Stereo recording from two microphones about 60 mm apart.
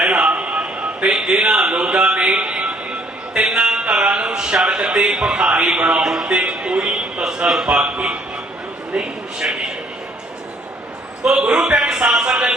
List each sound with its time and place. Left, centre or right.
0.0 s a sound: centre
1.1 s a man's voice: centre
11.3 s a man's voice: centre